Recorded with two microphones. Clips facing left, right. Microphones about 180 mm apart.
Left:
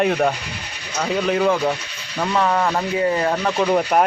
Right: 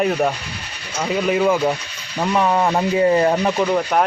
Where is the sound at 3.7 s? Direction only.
5° left (ahead or behind).